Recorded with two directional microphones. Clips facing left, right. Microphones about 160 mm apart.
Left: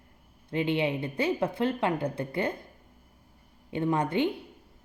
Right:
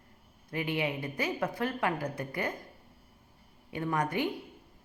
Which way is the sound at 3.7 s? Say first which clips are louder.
Left 4 dB; 25° left (ahead or behind).